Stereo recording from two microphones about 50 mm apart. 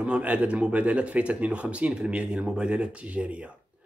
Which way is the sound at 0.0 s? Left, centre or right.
Right.